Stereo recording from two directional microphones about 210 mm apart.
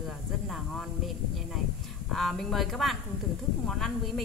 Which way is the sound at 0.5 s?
Centre (ahead or behind).